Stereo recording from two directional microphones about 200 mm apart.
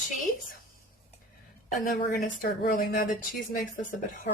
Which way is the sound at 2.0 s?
50° left (ahead or behind).